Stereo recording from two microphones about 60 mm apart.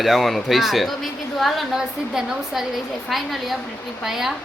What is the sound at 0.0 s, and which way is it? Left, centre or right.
Speech, centre.